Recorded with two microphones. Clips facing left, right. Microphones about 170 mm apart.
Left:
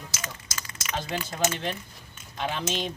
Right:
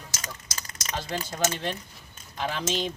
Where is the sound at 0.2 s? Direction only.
40° right (ahead or behind).